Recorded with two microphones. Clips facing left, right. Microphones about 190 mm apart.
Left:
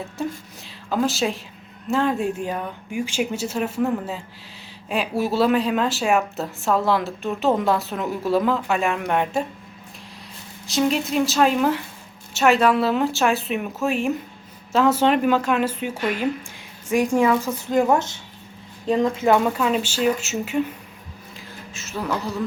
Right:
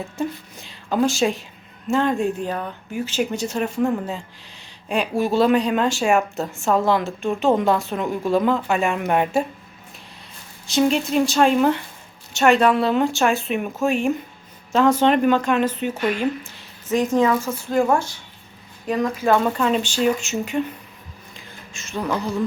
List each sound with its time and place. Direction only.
0.2 s speech: centre (ahead or behind)
10.7 s speech: centre (ahead or behind)
16.9 s speech: 10° left (ahead or behind)
19.5 s speech: 5° left (ahead or behind)
21.3 s a sound: 5° left (ahead or behind)